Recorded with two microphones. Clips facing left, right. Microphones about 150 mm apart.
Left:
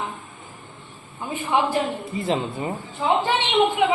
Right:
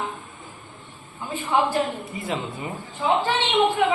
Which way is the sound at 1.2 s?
20° left (ahead or behind).